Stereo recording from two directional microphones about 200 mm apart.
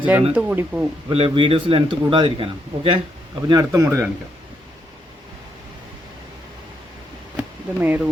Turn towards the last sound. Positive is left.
turn(degrees=-10)  # may be behind; listen again after turning